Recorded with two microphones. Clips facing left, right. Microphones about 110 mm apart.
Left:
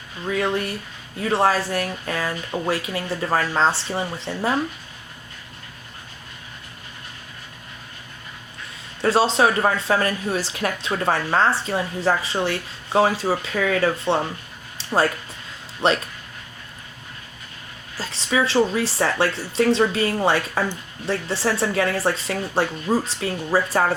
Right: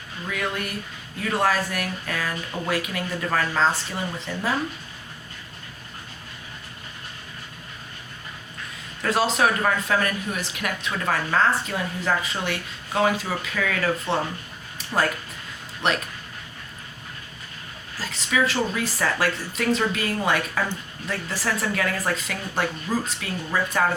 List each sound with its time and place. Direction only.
0.3 s speech: 30° left (ahead or behind)
9.0 s speech: 30° left (ahead or behind)
15.8 s speech: 30° left (ahead or behind)
17.9 s speech: 30° left (ahead or behind)